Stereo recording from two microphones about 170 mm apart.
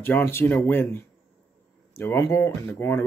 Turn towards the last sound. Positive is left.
turn(degrees=15)  # may be behind; listen again after turning